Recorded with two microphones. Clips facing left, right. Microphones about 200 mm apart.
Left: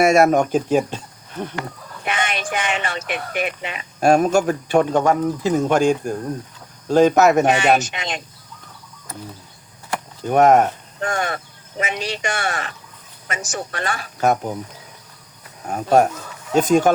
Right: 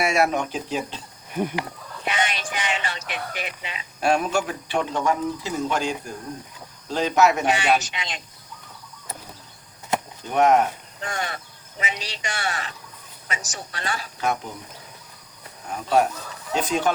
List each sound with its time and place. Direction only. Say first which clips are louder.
0.0 s speech: left 8 dB; 45° left (ahead or behind)
1.3 s speech: right 2 dB; 10° right (ahead or behind)
2.0 s speech: left 3 dB; 55° left (ahead or behind)
10.2 s speech: left 5 dB; 50° left (ahead or behind)
15.6 s speech: left 5 dB; 50° left (ahead or behind)